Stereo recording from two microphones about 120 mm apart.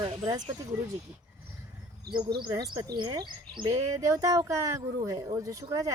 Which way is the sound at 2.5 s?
30° right (ahead or behind).